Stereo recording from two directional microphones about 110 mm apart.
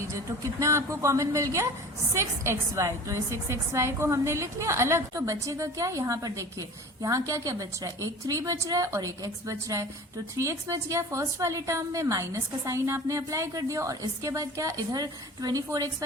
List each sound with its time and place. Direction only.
0.1 s a woman's voice: 30° right (ahead or behind)